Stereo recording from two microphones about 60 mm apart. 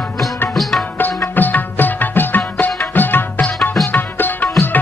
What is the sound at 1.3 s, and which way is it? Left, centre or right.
Music, left.